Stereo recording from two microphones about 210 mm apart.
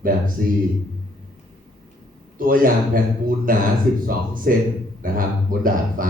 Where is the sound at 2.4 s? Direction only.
40° right (ahead or behind).